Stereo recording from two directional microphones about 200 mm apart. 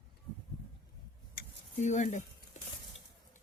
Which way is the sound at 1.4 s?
35° left (ahead or behind).